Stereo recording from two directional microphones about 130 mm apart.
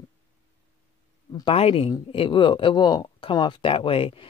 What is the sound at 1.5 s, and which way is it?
Speech, 50° left (ahead or behind).